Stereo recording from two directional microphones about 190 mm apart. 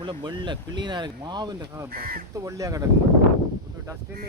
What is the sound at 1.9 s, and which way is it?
Speech, 50° right (ahead or behind).